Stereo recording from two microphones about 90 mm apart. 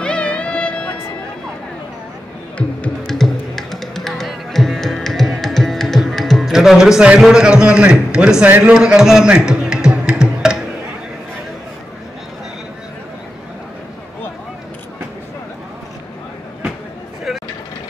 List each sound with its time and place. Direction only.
0.0 s music: 15° left (ahead or behind)
3.1 s music: 5° left (ahead or behind)
8.5 s a man's voice: 20° right (ahead or behind)
8.7 s a man's voice: 10° right (ahead or behind)